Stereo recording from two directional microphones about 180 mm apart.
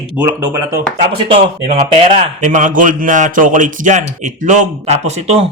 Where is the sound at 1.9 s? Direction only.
35° right (ahead or behind).